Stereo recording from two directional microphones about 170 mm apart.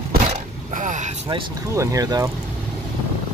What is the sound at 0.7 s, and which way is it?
Vehicle, 50° right (ahead or behind).